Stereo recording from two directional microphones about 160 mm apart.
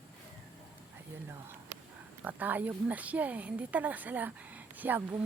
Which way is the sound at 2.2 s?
10° right (ahead or behind).